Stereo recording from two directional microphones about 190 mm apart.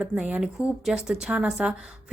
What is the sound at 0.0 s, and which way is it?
A woman's voice, 5° right (ahead or behind).